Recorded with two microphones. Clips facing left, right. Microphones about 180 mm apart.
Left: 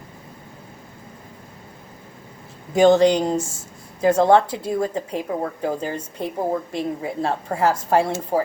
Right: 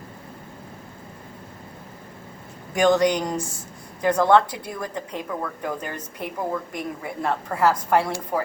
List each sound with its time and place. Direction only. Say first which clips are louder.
2.7 s a woman's voice: left 5 dB; 25° left (ahead or behind)